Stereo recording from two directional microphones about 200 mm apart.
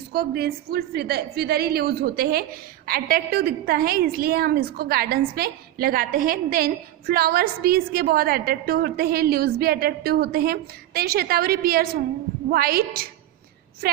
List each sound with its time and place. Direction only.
0.1 s a woman's voice: 50° right (ahead or behind)